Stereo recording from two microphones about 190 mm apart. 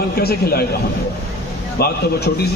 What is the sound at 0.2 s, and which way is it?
Speech, 55° left (ahead or behind).